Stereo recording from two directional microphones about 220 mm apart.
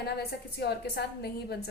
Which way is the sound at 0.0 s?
45° left (ahead or behind).